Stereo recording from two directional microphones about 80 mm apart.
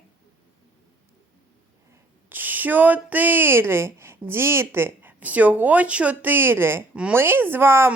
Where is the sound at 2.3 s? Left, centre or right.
Right.